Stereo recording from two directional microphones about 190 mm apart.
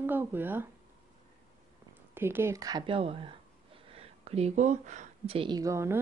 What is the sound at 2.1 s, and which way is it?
Speech, 10° right (ahead or behind).